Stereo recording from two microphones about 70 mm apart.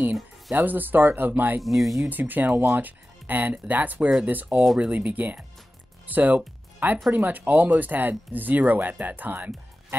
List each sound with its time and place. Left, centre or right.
0.5 s speech: right
1.6 s speech: centre
2.0 s speech: right
6.0 s music: right
7.1 s speech: right